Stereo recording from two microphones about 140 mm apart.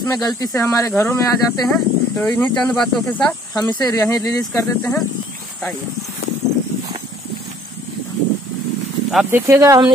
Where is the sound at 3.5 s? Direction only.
30° left (ahead or behind).